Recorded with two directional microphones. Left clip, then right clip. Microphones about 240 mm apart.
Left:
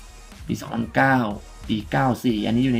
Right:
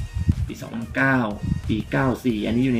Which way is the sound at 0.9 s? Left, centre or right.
Left.